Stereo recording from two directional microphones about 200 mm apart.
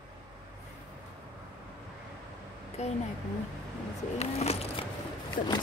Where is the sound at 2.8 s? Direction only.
35° left (ahead or behind).